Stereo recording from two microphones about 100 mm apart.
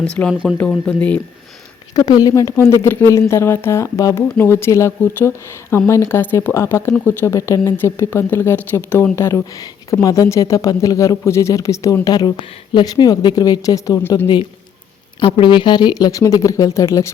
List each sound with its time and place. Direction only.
0.2 s speech: 15° left (ahead or behind)
2.0 s speech: 40° left (ahead or behind)
2.3 s speech: 30° left (ahead or behind)
12.0 s speech: 45° left (ahead or behind)
15.2 s speech: 55° left (ahead or behind); by 17.1 s 30° left (ahead or behind)